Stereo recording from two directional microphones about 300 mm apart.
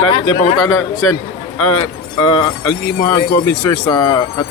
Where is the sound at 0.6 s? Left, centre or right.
Left.